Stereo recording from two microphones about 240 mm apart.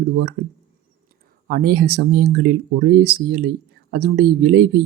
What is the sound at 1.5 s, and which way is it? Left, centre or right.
Speech, right.